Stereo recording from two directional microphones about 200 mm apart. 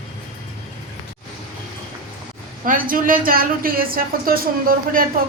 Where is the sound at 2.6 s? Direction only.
45° right (ahead or behind).